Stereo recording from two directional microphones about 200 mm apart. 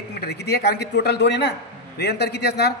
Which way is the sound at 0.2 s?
55° left (ahead or behind).